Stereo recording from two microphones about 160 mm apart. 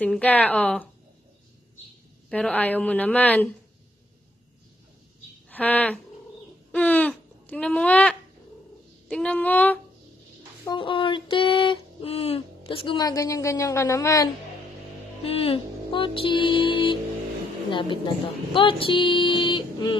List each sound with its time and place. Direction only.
0.0 s speech: 10° left (ahead or behind)
2.2 s speech: 5° left (ahead or behind)
5.5 s speech: 10° left (ahead or behind)
6.7 s a sound: 10° left (ahead or behind)
9.1 s speech: 10° left (ahead or behind)
10.6 s speech: 30° left (ahead or behind)
15.2 s speech: 35° left (ahead or behind)